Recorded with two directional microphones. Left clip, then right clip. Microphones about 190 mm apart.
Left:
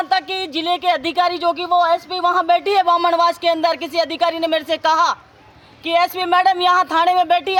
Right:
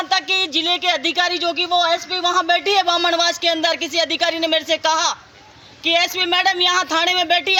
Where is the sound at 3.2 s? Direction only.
35° left (ahead or behind).